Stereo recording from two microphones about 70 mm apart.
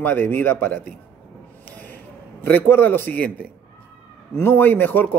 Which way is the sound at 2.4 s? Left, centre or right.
Left.